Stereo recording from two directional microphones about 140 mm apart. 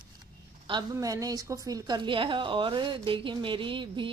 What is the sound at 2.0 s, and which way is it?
A woman's voice, 35° right (ahead or behind).